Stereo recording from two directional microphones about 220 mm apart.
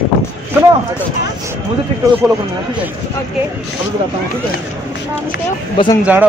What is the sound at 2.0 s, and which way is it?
Speech, 15° right (ahead or behind).